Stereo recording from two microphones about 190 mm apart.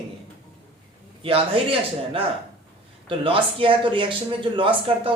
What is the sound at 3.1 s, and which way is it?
A man's voice, 30° right (ahead or behind).